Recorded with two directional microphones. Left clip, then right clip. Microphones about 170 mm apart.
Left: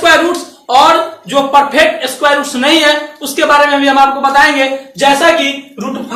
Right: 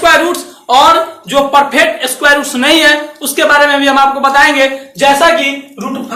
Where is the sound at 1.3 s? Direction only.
10° right (ahead or behind).